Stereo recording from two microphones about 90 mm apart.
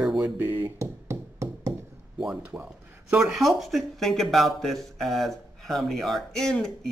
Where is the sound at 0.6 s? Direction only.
35° right (ahead or behind).